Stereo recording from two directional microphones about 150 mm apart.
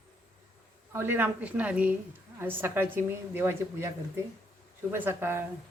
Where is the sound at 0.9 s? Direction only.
15° right (ahead or behind).